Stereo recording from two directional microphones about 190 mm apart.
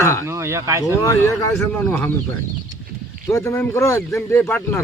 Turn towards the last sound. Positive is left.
turn(degrees=10)  # may be behind; listen again after turning